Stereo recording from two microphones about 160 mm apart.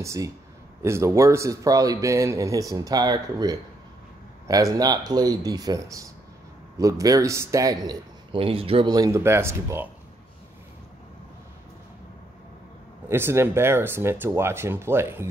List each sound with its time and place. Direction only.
0.0 s speech: 20° right (ahead or behind); by 8.9 s 35° right (ahead or behind)
8.9 s speech: 20° right (ahead or behind)
13.1 s speech: 15° right (ahead or behind)